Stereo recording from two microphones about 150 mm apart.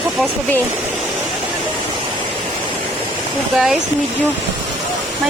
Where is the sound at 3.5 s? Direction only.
5° right (ahead or behind).